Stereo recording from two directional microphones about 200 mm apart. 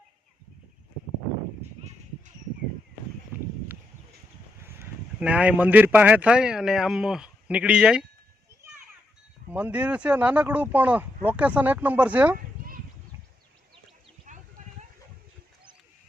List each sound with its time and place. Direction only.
4.8 s speech: 5° right (ahead or behind)
9.5 s speech: 10° right (ahead or behind)
14.3 s clip-clop: 40° right (ahead or behind)